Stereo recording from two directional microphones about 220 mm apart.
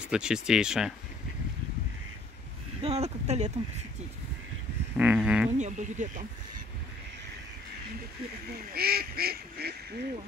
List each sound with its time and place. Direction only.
0.1 s speech: 5° right (ahead or behind)
2.8 s speech: 30° right (ahead or behind)
4.9 s speech: 5° right (ahead or behind)
5.6 s speech: 35° right (ahead or behind)
8.7 s goose: 45° right (ahead or behind)